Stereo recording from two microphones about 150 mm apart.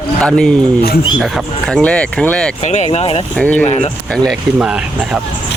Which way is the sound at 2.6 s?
50° left (ahead or behind).